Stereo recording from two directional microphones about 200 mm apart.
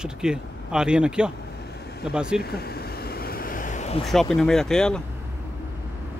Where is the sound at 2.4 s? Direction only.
50° left (ahead or behind); by 4.0 s 35° left (ahead or behind).